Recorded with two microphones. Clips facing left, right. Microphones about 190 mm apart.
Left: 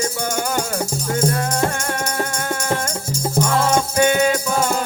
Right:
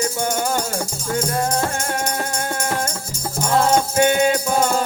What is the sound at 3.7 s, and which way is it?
Music, 35° right (ahead or behind).